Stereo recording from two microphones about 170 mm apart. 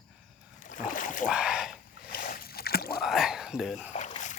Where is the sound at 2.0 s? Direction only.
55° left (ahead or behind).